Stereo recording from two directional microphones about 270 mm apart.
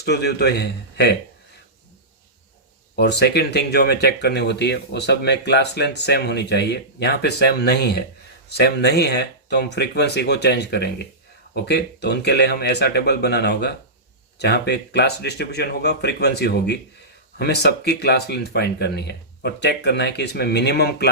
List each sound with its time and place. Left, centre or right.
0.0 s speech: left
2.9 s speech: left